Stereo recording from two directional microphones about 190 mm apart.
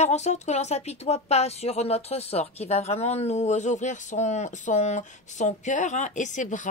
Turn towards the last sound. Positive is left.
turn(degrees=40)  # may be behind; listen again after turning